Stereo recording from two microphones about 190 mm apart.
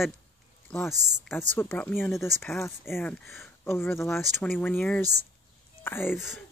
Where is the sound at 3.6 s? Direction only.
10° left (ahead or behind).